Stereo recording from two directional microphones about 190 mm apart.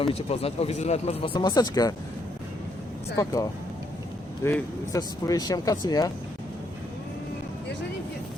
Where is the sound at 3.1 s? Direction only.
20° left (ahead or behind).